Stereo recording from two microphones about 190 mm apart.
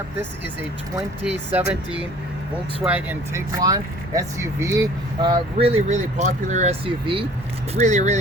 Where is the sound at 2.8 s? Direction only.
10° right (ahead or behind); by 7.2 s 30° right (ahead or behind).